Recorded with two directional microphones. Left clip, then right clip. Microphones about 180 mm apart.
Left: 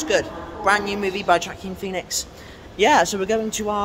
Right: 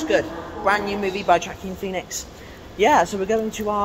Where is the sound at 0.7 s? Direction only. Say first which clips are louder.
Left 1 dB; 15° left (ahead or behind).